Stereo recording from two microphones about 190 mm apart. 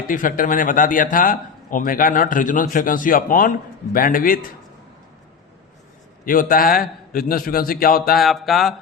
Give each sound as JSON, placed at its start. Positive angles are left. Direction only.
{"t": 0.1, "sound": "speech", "side_deg": 45}
{"t": 6.2, "sound": "speech", "side_deg": 45}
{"t": 8.2, "sound": "speech", "side_deg": 0}